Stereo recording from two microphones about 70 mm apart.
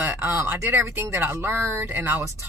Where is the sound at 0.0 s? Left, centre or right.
Right.